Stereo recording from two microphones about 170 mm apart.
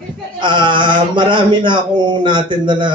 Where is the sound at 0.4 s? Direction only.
30° right (ahead or behind).